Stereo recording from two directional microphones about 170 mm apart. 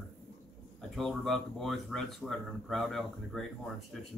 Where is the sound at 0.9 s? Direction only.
Centre (ahead or behind).